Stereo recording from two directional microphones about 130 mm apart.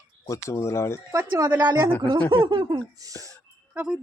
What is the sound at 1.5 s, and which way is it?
Speech, 10° right (ahead or behind).